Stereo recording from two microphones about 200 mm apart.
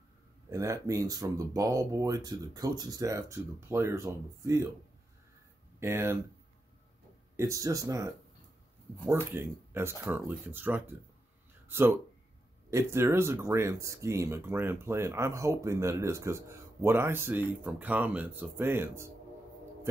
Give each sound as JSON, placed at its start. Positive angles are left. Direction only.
{"t": 0.5, "sound": "speech", "side_deg": -15}
{"t": 5.8, "sound": "speech", "side_deg": -10}
{"t": 7.3, "sound": "speech", "side_deg": -15}